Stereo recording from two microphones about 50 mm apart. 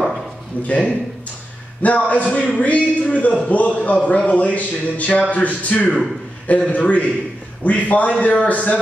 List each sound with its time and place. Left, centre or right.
0.6 s a man's voice: left